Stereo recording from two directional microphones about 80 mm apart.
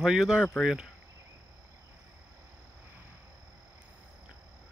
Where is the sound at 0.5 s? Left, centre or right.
Centre.